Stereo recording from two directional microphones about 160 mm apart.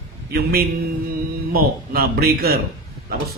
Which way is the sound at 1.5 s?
70° right (ahead or behind).